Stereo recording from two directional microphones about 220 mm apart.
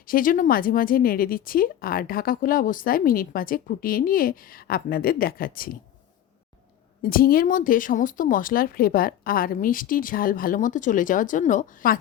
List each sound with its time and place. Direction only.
0.0 s speech: 40° left (ahead or behind)
7.0 s speech: 40° left (ahead or behind)